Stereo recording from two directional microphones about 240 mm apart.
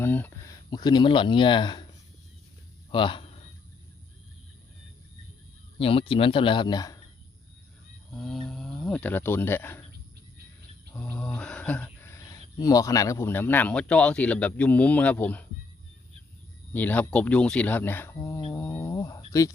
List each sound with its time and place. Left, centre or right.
0.0 s speech: centre
2.9 s speech: centre
5.8 s speech: left
8.1 s speech: centre
10.9 s speech: centre
16.7 s speech: centre